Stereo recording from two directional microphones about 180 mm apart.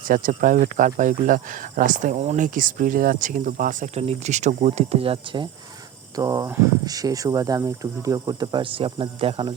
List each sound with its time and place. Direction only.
0.1 s speech: 50° right (ahead or behind); by 9.6 s 30° right (ahead or behind)